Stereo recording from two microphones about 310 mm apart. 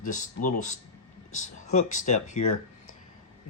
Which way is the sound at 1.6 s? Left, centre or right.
Left.